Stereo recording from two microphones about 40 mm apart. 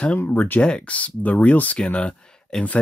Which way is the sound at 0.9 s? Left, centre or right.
Left.